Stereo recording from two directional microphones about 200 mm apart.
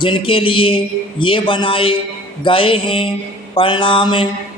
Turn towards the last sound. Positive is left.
turn(degrees=25)  # may be behind; listen again after turning